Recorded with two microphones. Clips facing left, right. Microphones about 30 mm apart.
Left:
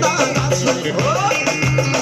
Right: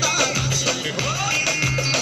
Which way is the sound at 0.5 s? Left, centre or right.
Right.